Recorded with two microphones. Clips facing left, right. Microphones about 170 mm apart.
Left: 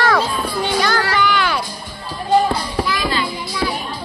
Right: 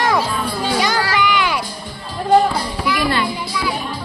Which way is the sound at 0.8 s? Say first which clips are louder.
Even; 15° right (ahead or behind).